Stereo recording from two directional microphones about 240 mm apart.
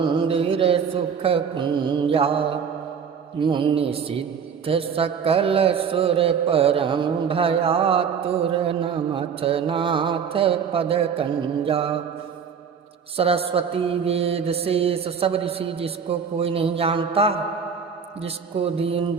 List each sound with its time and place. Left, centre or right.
0.0 s music: centre
1.2 s mantra: right
3.4 s mantra: centre
13.1 s mantra: right